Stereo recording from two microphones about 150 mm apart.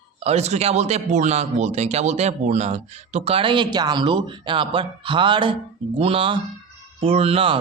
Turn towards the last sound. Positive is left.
turn(degrees=-35)  # may be behind; listen again after turning